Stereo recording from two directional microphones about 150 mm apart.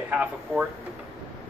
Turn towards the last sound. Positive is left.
turn(degrees=-10)  # may be behind; listen again after turning